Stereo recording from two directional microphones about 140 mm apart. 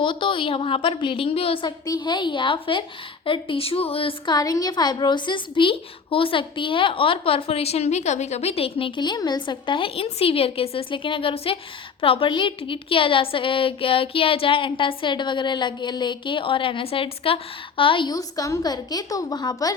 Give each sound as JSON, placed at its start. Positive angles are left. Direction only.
{"t": 0.0, "sound": "a woman's voice", "side_deg": 35}
{"t": 4.4, "sound": "a woman's voice", "side_deg": 25}